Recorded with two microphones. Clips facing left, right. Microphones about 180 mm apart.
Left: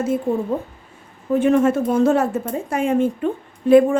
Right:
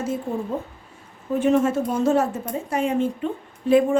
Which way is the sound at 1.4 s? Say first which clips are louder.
Left 3 dB; 60° left (ahead or behind).